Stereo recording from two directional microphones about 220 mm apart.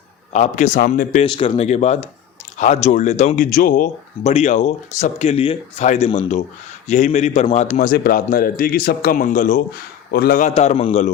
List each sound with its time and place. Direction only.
0.3 s speech: 35° left (ahead or behind)